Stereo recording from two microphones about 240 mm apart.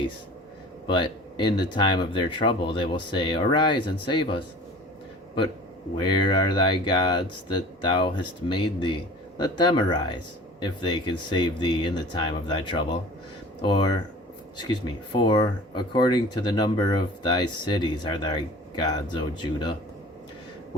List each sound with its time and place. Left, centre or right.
0.9 s speech: centre
6.0 s speech: centre
15.1 s speech: centre